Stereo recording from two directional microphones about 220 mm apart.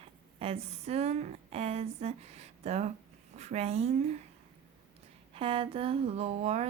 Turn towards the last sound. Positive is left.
turn(degrees=-30)  # may be behind; listen again after turning